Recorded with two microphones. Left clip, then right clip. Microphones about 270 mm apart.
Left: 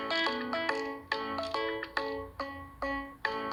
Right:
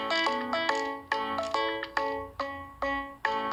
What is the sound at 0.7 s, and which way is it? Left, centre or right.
Music, centre.